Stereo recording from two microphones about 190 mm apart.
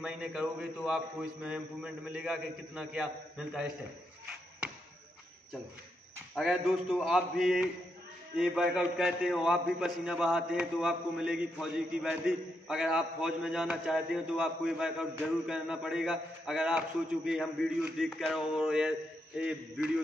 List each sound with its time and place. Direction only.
0.0 s a man's voice: 5° right (ahead or behind)
6.3 s a man's voice: centre (ahead or behind)